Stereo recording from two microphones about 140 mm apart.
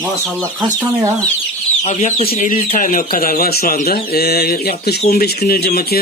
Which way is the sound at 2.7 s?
75° left (ahead or behind).